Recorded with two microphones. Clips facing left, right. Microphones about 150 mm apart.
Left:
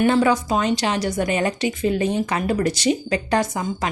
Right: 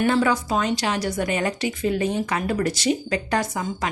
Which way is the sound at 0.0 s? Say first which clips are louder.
Left 3 dB; 20° left (ahead or behind).